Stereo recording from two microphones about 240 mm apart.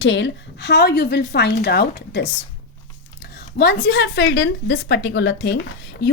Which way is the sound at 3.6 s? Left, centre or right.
Left.